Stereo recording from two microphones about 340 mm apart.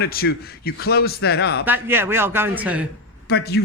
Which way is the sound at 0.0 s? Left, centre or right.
Left.